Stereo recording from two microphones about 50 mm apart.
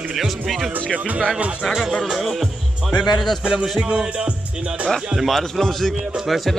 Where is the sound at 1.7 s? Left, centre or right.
Centre.